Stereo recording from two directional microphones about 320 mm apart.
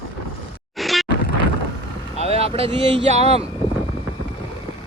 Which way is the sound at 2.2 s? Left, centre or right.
Centre.